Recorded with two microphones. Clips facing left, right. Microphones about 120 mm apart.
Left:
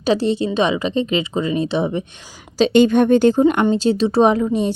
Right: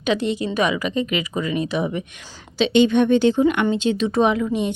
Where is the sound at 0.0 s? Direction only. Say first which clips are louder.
Left 4 dB; 35° left (ahead or behind).